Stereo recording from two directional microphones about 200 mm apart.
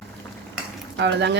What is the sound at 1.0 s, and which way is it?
Speech, 60° right (ahead or behind).